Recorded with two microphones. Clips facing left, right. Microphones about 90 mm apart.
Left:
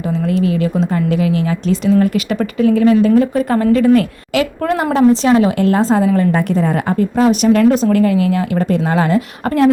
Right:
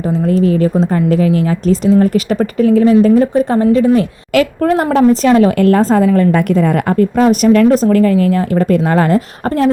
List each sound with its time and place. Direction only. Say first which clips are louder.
0.1 s a woman's voice: right 4 dB; 35° right (ahead or behind)
4.3 s a woman's voice: right 8 dB; 45° right (ahead or behind)